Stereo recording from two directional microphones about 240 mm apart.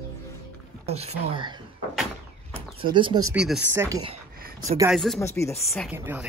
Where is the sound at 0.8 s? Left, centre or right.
Right.